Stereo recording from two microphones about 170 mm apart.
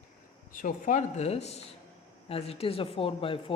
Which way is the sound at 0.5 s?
50° left (ahead or behind).